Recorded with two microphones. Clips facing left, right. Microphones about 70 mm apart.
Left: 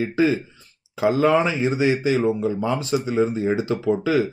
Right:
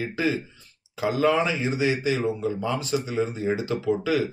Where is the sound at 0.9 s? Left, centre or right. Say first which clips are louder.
Left 4 dB; left.